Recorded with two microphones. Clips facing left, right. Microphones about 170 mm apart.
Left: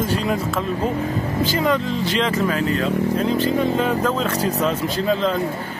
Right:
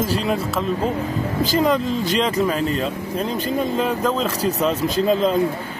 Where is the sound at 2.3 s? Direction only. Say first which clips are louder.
Even; 15° right (ahead or behind).